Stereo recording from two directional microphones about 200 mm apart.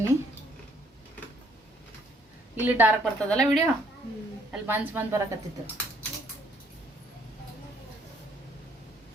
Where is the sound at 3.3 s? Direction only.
5° left (ahead or behind).